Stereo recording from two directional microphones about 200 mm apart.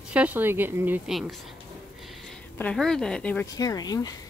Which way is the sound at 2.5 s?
5° left (ahead or behind).